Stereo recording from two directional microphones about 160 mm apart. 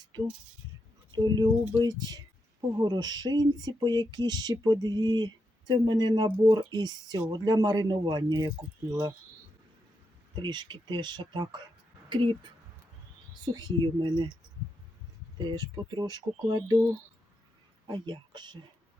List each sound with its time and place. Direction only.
1.1 s speech: 25° right (ahead or behind)
10.3 s speech: 30° right (ahead or behind)
13.4 s speech: 25° right (ahead or behind)
15.4 s speech: 25° right (ahead or behind)
17.8 s speech: 30° right (ahead or behind)